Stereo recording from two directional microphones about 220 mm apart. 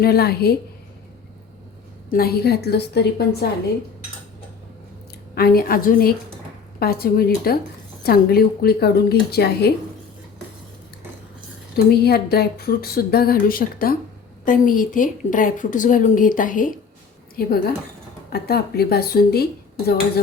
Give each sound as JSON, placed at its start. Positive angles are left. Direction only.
{"t": 0.0, "sound": "speech", "side_deg": 45}
{"t": 2.1, "sound": "speech", "side_deg": 45}
{"t": 5.3, "sound": "a woman's voice", "side_deg": 45}
{"t": 11.9, "sound": "a woman's voice", "side_deg": 45}